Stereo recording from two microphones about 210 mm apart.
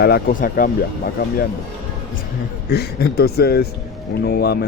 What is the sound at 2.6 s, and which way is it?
Speech, 50° left (ahead or behind).